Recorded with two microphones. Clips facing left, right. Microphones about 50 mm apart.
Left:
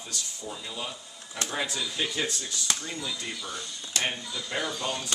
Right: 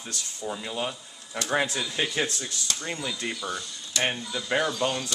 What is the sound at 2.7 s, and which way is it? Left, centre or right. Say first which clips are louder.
Speech: left 2 dB; left.